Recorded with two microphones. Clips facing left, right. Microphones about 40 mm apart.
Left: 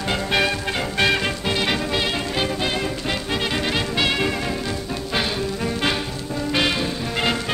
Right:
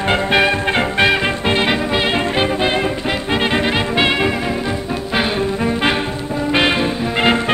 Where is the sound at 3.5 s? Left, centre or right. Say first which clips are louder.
Right 6 dB; right.